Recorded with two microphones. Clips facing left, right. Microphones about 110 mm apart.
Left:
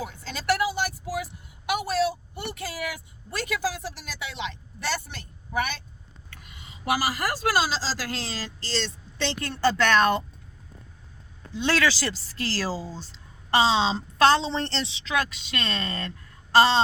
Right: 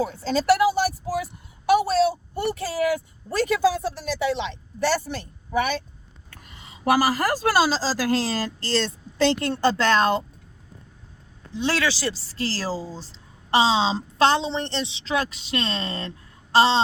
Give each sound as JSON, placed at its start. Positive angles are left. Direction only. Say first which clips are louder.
{"t": 0.0, "sound": "speech", "louder": "right 10 dB", "side_deg": -30}
{"t": 1.6, "sound": "a sound", "louder": "right 6 dB", "side_deg": -30}
{"t": 6.3, "sound": "a woman's voice", "louder": "right 2 dB", "side_deg": -40}
{"t": 9.5, "sound": "speech", "louder": "right 2 dB", "side_deg": -30}
{"t": 11.5, "sound": "a woman's voice", "louder": "even", "side_deg": -25}
{"t": 13.1, "sound": "a woman's voice", "louder": "right 1 dB", "side_deg": -25}